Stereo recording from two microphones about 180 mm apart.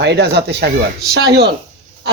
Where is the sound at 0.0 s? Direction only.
70° right (ahead or behind).